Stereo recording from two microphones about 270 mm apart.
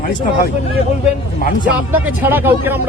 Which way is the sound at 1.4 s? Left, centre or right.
Left.